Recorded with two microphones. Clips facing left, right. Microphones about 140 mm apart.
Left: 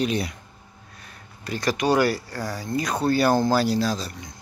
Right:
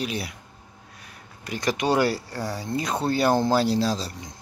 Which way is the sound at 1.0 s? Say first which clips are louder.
Left 3 dB; 15° right (ahead or behind).